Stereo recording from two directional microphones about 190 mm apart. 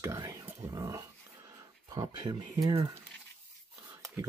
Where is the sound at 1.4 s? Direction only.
20° right (ahead or behind).